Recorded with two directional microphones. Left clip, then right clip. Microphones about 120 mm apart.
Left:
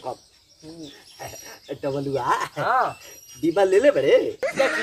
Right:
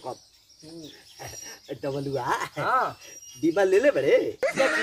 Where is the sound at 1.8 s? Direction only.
20° left (ahead or behind).